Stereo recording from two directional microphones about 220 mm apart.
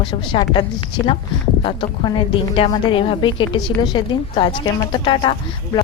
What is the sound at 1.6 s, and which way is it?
Speech, 20° left (ahead or behind).